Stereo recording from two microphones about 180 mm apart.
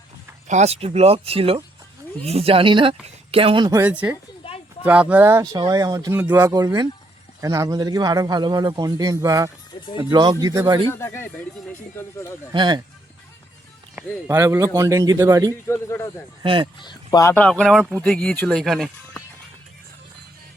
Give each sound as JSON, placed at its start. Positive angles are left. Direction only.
{"t": 0.4, "sound": "a man's voice", "side_deg": -40}
{"t": 3.8, "sound": "speech", "side_deg": -10}
{"t": 4.4, "sound": "a sound", "side_deg": 30}
{"t": 4.8, "sound": "speech", "side_deg": -5}
{"t": 6.1, "sound": "speech", "side_deg": -10}
{"t": 6.5, "sound": "a man's voice", "side_deg": -20}
{"t": 10.8, "sound": "speech", "side_deg": 15}
{"t": 12.5, "sound": "a man's voice", "side_deg": -25}
{"t": 13.9, "sound": "a man's voice", "side_deg": -15}
{"t": 15.6, "sound": "speech", "side_deg": 15}
{"t": 16.4, "sound": "a man's voice", "side_deg": -30}
{"t": 16.8, "sound": "speech", "side_deg": 25}